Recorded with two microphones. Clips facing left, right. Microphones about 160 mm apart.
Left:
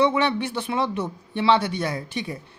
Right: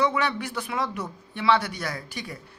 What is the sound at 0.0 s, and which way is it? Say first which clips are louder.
Speech: left 4 dB; 25° left (ahead or behind).